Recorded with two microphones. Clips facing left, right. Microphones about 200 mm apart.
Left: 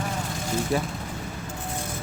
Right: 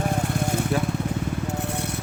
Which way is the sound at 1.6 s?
70° right (ahead or behind).